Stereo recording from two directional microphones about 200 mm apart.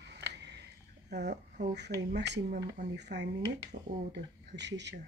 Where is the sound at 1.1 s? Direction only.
55° right (ahead or behind).